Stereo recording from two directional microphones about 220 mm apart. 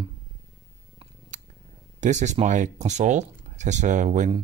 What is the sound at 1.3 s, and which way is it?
Purr, 35° right (ahead or behind).